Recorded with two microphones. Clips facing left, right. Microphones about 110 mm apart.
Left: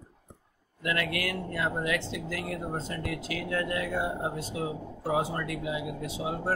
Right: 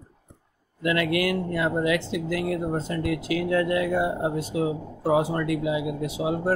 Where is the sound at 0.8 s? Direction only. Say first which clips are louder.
Right 7 dB; 10° right (ahead or behind).